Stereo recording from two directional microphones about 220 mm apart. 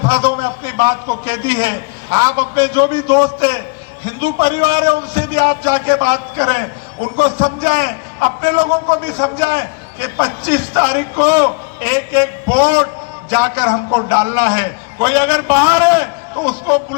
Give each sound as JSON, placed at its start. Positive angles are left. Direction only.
{"t": 0.1, "sound": "a man's voice", "side_deg": -10}